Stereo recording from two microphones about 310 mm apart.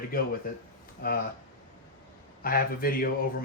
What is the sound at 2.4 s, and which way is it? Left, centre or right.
Speech, left.